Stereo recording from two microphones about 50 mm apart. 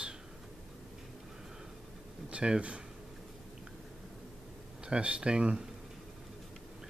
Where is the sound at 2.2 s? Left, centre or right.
Centre.